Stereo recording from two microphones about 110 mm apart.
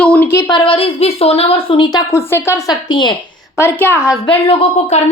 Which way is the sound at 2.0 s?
20° left (ahead or behind).